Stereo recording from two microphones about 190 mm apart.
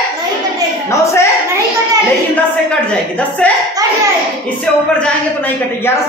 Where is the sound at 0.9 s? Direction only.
15° left (ahead or behind).